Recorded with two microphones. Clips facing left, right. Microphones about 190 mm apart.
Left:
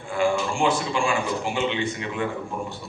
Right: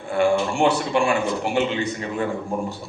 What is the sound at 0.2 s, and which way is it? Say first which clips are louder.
Speech: right 4 dB; 65° right (ahead or behind).